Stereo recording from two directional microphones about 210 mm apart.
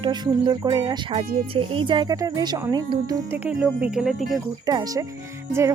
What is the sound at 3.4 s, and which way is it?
Speech, 5° right (ahead or behind).